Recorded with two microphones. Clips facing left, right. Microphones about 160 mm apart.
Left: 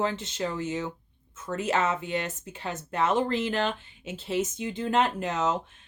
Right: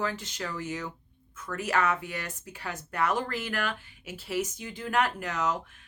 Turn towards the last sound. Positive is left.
turn(degrees=25)  # may be behind; listen again after turning